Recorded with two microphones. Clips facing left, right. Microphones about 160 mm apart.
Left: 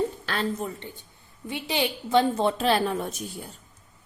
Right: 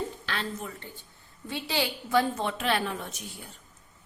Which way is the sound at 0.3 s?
40° left (ahead or behind).